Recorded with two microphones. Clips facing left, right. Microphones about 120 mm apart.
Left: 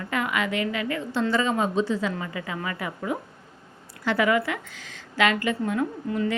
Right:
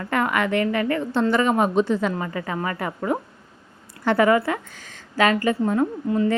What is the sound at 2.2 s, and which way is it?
A woman's voice, 40° right (ahead or behind).